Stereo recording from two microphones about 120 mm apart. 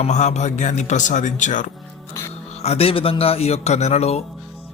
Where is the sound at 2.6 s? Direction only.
55° left (ahead or behind).